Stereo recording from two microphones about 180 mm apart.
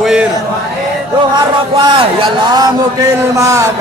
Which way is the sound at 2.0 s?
25° right (ahead or behind).